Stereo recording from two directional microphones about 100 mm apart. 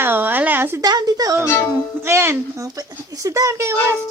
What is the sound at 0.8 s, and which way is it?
Speech, 40° right (ahead or behind).